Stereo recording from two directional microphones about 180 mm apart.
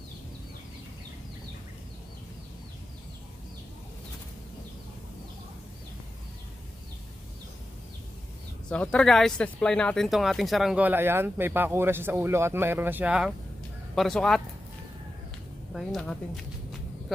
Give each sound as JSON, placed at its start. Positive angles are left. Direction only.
{"t": 8.6, "sound": "speech", "side_deg": 5}
{"t": 15.7, "sound": "speech", "side_deg": 0}